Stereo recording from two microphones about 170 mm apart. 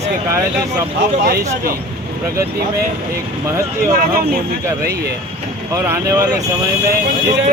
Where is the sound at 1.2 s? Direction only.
65° right (ahead or behind).